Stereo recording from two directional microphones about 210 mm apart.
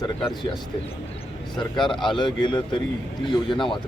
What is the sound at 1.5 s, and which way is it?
A man's voice, 20° left (ahead or behind).